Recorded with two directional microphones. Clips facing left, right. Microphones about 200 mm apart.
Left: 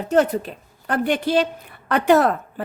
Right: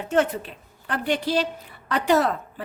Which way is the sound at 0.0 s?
40° left (ahead or behind).